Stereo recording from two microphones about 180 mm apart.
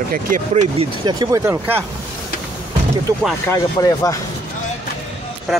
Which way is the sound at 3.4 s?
15° left (ahead or behind).